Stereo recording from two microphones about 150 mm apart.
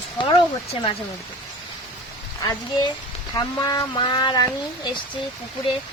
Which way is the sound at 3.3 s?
25° left (ahead or behind).